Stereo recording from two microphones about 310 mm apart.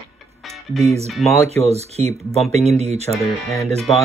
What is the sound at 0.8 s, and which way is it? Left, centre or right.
Speech, centre.